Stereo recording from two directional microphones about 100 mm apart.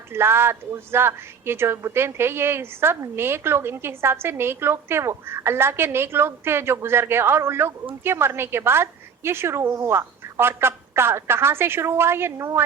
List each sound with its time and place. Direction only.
0.1 s speech: 25° right (ahead or behind)